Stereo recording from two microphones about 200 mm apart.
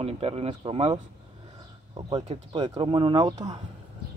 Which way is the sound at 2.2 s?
25° right (ahead or behind).